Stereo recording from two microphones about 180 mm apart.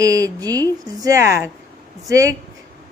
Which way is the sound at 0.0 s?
20° right (ahead or behind).